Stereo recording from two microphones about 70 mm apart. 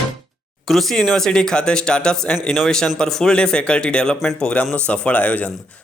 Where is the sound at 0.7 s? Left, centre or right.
Centre.